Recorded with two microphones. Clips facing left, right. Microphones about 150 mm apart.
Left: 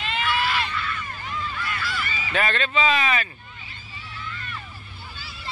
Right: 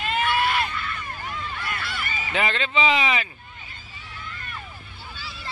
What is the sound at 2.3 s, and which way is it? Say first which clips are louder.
Speech: left 1 dB; 15° right (ahead or behind).